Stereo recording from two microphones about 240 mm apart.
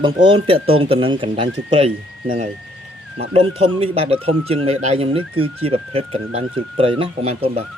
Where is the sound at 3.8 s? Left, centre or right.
Right.